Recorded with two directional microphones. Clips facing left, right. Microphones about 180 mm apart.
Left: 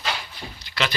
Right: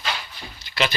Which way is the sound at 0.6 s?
15° right (ahead or behind).